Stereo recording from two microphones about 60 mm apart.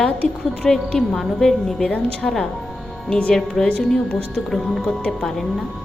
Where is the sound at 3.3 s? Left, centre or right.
Centre.